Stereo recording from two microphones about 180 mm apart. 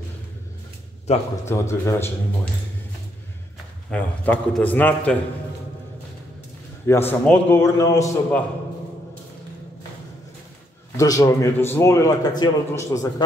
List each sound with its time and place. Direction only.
1.4 s a man's voice: 15° left (ahead or behind)
3.9 s a man's voice: 5° left (ahead or behind)
6.9 s a man's voice: 10° left (ahead or behind)
11.0 s a man's voice: 20° left (ahead or behind)